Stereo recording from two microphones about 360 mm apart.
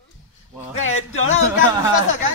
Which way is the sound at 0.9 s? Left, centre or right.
Left.